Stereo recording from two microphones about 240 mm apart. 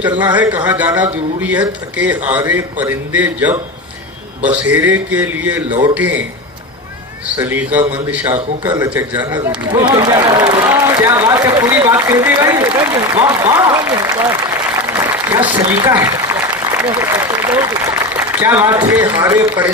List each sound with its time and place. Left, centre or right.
0.7 s speech: centre
7.3 s speech: centre